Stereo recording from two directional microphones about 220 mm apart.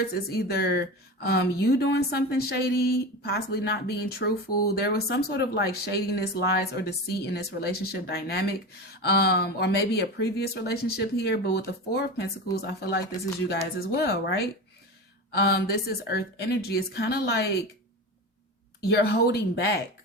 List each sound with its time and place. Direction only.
0.0 s speech: 45° left (ahead or behind)
18.8 s speech: 45° left (ahead or behind)